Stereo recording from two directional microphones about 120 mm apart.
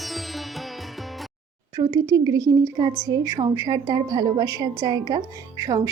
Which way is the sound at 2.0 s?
30° right (ahead or behind).